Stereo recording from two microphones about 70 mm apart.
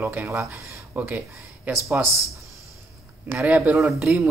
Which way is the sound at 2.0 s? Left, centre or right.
Right.